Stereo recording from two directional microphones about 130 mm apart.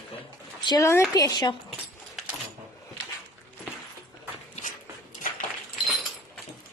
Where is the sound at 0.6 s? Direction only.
35° left (ahead or behind).